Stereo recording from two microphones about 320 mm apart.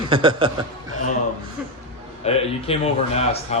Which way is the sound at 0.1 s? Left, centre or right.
Centre.